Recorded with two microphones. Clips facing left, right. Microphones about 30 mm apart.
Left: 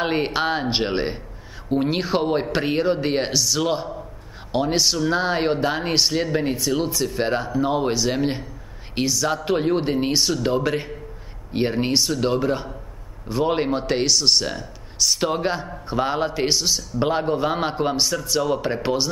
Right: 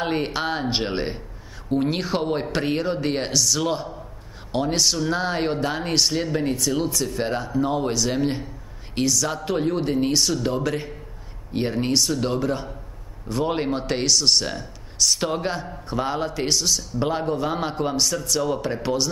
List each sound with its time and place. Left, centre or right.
0.0 s a man's voice: centre